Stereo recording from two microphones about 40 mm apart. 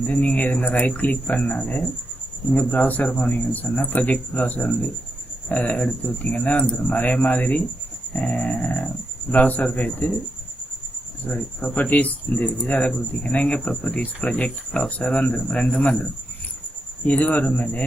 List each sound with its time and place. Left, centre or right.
0.0 s speech: left
11.3 s speech: left
11.6 s speech: left
15.7 s speech: left
17.1 s speech: left